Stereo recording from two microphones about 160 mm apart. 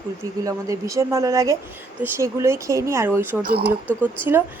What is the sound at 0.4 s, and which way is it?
A woman's voice, 20° right (ahead or behind).